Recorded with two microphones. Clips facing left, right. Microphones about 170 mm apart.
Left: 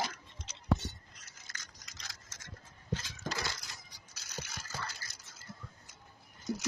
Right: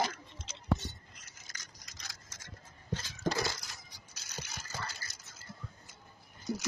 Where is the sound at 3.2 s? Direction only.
30° right (ahead or behind).